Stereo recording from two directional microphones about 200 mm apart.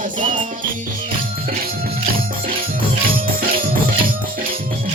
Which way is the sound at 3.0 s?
45° right (ahead or behind).